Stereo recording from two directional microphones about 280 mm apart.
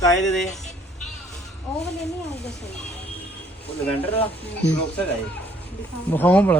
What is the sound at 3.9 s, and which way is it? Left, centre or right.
Speech, centre.